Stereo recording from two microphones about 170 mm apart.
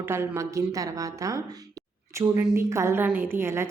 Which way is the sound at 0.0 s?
15° right (ahead or behind).